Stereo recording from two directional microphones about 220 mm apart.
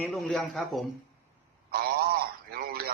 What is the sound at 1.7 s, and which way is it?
A man's voice, 45° right (ahead or behind).